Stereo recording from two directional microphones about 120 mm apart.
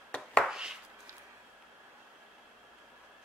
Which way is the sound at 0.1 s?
10° left (ahead or behind).